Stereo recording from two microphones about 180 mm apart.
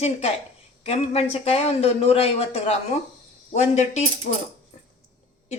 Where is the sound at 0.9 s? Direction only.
35° left (ahead or behind).